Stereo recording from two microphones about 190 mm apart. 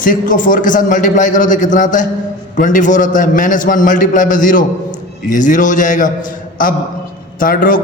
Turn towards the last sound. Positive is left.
turn(degrees=45)  # may be behind; listen again after turning